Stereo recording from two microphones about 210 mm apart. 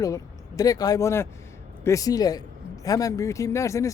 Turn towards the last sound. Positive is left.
turn(degrees=15)  # may be behind; listen again after turning